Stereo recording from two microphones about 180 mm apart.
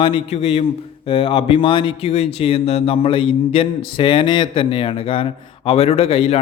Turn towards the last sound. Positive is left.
turn(degrees=30)  # may be behind; listen again after turning